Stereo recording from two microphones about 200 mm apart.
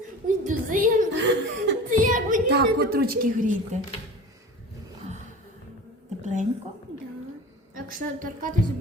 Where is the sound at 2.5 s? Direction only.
55° right (ahead or behind).